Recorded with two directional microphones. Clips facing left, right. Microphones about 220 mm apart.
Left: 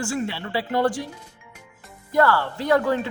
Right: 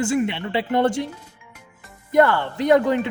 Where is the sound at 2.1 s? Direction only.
20° right (ahead or behind).